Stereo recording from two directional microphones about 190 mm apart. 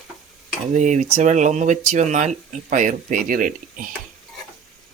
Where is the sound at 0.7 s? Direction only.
40° right (ahead or behind).